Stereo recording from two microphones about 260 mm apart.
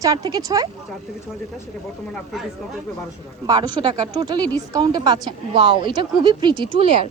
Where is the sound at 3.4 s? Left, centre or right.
Centre.